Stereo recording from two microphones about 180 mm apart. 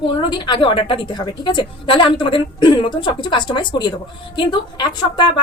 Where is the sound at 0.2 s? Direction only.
25° left (ahead or behind).